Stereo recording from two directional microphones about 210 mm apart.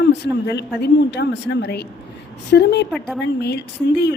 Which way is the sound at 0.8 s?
55° left (ahead or behind).